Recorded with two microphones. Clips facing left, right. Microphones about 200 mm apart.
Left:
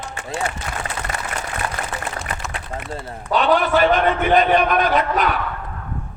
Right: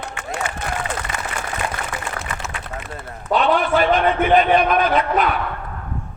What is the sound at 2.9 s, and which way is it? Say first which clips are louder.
Speech: right 1 dB; 30° left (ahead or behind).